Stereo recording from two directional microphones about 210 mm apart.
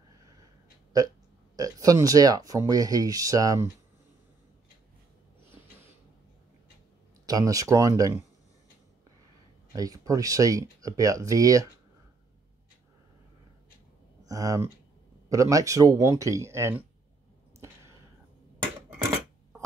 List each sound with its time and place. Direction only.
1.6 s speech: 15° right (ahead or behind)
7.2 s speech: 15° right (ahead or behind)
9.7 s speech: 15° right (ahead or behind)
14.2 s speech: 15° right (ahead or behind)